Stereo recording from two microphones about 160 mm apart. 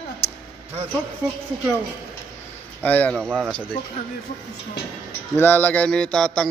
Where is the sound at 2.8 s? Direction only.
10° left (ahead or behind).